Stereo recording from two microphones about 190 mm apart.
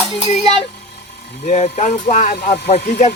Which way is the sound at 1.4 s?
40° left (ahead or behind).